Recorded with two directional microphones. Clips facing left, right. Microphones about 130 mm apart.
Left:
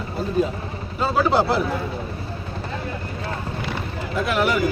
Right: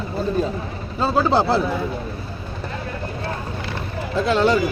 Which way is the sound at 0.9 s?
30° right (ahead or behind).